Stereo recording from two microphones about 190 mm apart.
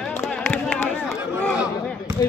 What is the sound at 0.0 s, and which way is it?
Music, 5° left (ahead or behind).